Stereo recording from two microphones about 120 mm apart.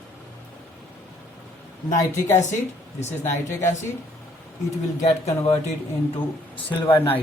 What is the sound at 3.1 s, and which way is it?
Speech, 20° left (ahead or behind).